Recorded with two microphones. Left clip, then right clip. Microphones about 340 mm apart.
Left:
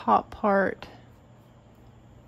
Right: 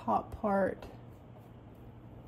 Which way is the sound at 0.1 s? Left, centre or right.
Centre.